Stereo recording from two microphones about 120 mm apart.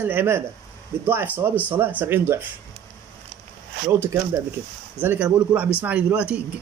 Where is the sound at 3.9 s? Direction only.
20° right (ahead or behind).